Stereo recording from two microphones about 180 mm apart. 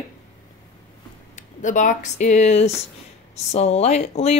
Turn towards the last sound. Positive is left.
turn(degrees=35)  # may be behind; listen again after turning